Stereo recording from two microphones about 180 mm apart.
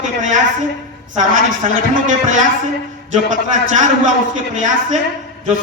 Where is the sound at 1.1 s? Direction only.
45° right (ahead or behind).